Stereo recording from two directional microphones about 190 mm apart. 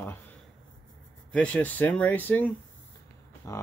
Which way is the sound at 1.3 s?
5° left (ahead or behind).